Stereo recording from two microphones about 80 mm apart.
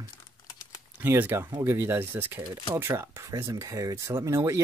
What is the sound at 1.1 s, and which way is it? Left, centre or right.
Speech, right.